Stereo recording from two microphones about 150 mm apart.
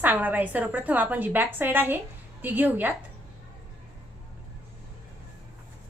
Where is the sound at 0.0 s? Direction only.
10° right (ahead or behind).